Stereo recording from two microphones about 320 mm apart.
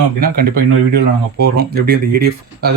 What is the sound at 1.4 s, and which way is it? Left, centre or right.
Speech, right.